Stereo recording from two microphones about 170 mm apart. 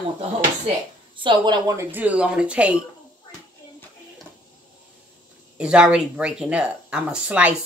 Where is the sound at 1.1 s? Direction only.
30° right (ahead or behind); by 2.8 s 5° right (ahead or behind).